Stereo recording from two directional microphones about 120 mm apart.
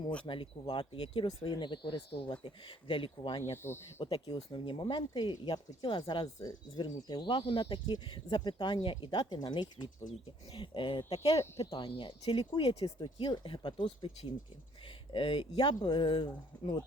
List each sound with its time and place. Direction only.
0.3 s speech: 45° left (ahead or behind)
3.5 s speech: 20° left (ahead or behind)
4.0 s speech: 40° left (ahead or behind)
11.1 s speech: 55° left (ahead or behind)
11.8 s speech: 40° left (ahead or behind)